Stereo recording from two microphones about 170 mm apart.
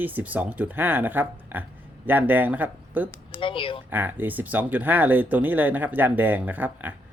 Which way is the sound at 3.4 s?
30° left (ahead or behind).